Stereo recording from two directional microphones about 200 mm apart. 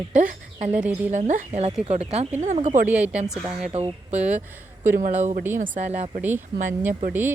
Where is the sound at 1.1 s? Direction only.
35° right (ahead or behind).